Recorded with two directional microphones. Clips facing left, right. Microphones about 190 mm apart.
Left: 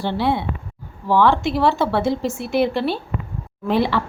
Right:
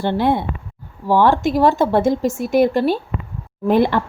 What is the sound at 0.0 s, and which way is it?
Speech, 50° right (ahead or behind).